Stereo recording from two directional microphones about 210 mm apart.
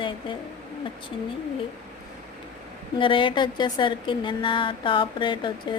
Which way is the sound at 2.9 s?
25° left (ahead or behind).